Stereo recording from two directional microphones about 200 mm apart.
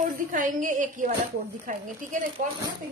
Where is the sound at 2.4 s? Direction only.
40° right (ahead or behind).